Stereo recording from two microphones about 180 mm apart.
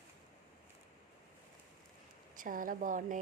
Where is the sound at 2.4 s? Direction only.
50° right (ahead or behind).